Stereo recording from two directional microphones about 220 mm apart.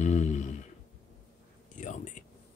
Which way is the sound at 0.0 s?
30° left (ahead or behind).